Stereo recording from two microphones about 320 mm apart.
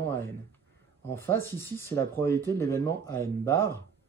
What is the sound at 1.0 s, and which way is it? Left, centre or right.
Speech, centre.